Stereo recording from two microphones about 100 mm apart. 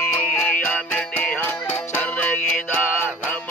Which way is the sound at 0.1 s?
20° left (ahead or behind).